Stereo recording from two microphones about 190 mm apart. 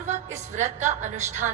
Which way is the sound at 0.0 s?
40° right (ahead or behind).